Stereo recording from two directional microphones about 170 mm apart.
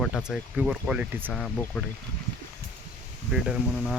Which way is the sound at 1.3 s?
5° left (ahead or behind).